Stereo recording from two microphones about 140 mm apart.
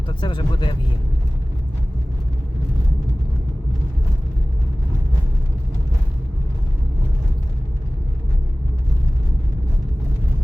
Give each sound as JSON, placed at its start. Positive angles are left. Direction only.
{"t": 0.1, "sound": "speech", "side_deg": 35}